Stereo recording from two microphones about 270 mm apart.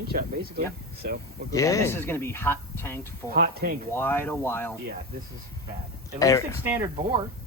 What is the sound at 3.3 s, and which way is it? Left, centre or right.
Speech, right.